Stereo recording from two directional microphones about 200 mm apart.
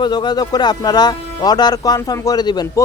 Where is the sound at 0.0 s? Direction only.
20° left (ahead or behind).